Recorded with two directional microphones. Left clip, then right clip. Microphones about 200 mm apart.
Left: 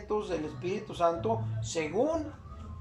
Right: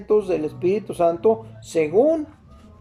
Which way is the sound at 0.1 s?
45° right (ahead or behind).